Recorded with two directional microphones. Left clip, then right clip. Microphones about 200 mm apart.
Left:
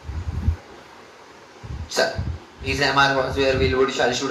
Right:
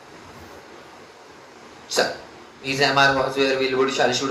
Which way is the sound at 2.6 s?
30° right (ahead or behind).